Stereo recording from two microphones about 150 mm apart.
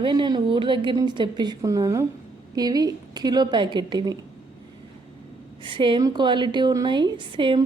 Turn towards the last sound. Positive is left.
turn(degrees=-35)  # may be behind; listen again after turning